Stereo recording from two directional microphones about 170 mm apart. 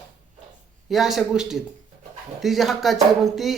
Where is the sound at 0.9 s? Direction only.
Centre (ahead or behind).